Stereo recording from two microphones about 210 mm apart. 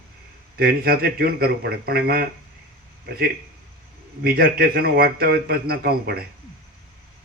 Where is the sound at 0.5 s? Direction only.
45° right (ahead or behind).